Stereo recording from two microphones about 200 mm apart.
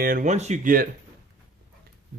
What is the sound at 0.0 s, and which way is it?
Speech, 45° right (ahead or behind).